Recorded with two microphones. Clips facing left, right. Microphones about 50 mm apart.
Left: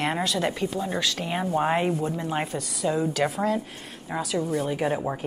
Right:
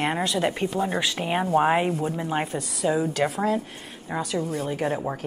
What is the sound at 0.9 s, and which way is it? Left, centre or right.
Speech, right.